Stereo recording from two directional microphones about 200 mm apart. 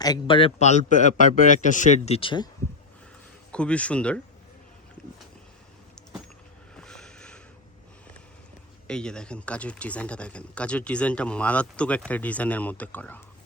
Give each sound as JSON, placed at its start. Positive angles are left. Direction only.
{"t": 0.0, "sound": "a man's voice", "side_deg": 20}
{"t": 3.5, "sound": "speech", "side_deg": 5}
{"t": 6.7, "sound": "vehicle", "side_deg": 5}
{"t": 8.9, "sound": "speech", "side_deg": 5}